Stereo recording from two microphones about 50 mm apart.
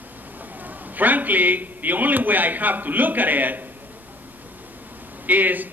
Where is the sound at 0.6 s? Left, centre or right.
Right.